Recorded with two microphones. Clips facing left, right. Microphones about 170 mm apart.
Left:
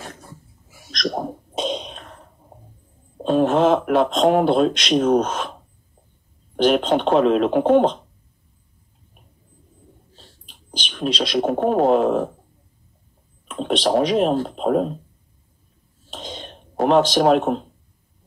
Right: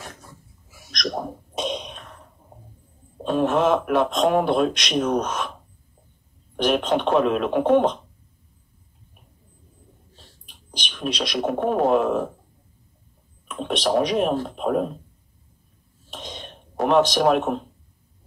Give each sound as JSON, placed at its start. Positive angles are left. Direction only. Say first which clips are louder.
{"t": 0.7, "sound": "sneeze", "louder": "left 3 dB", "side_deg": 30}
{"t": 3.3, "sound": "speech", "louder": "left 3 dB", "side_deg": 30}
{"t": 6.5, "sound": "speech", "louder": "left 4 dB", "side_deg": 30}
{"t": 10.8, "sound": "speech", "louder": "left 4 dB", "side_deg": 30}
{"t": 13.6, "sound": "speech", "louder": "left 3 dB", "side_deg": 30}
{"t": 16.1, "sound": "a sound", "louder": "left 3 dB", "side_deg": 30}